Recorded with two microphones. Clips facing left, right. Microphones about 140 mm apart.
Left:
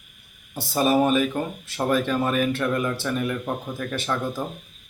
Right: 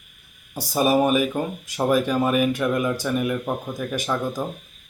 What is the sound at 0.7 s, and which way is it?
Speech, 10° right (ahead or behind).